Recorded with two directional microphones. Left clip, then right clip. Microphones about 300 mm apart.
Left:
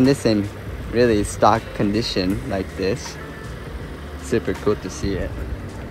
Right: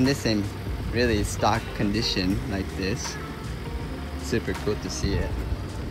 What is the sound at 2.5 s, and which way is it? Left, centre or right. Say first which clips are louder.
Speech: left 7 dB; left.